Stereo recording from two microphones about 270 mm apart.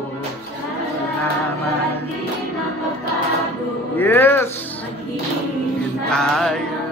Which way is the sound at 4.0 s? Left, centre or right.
Centre.